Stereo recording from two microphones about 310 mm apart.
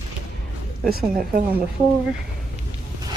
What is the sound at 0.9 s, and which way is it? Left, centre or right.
Speech, right.